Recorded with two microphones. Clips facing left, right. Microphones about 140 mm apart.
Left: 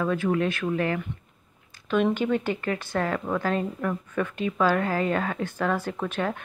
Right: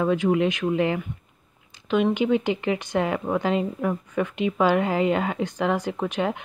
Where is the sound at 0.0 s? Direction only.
15° right (ahead or behind).